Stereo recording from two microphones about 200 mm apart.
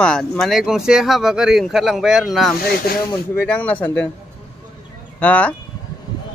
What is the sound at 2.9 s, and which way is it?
Speech, 50° left (ahead or behind).